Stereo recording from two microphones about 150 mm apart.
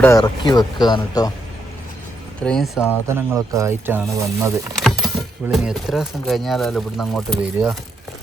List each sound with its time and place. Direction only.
0.2 s speech: 30° left (ahead or behind)
2.4 s speech: 5° left (ahead or behind)
3.2 s speech: 15° right (ahead or behind)
4.8 s a sound: centre (ahead or behind)
5.1 s speech: centre (ahead or behind)